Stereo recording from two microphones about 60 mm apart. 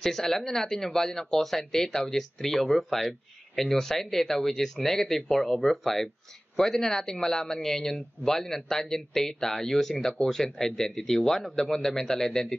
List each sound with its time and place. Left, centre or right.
0.0 s speech: centre